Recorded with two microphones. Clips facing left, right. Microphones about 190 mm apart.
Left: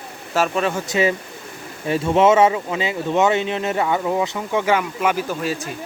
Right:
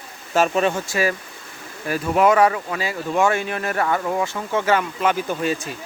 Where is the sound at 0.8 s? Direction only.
20° left (ahead or behind).